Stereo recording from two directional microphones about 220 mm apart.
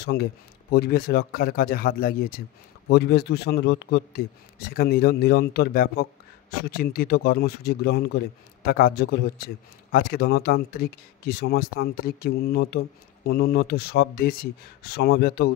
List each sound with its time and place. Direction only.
0.0 s a man's voice: 45° left (ahead or behind)